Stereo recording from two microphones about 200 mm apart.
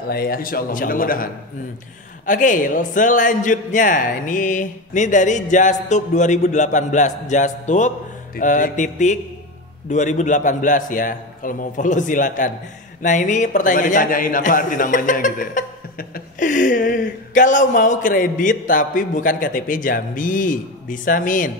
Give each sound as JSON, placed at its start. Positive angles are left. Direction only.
{"t": 0.1, "sound": "a man's voice", "side_deg": 45}